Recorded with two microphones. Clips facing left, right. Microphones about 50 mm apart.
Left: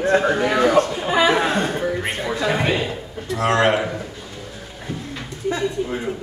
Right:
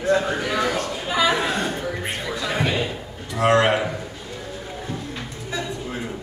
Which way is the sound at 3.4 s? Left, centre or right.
Centre.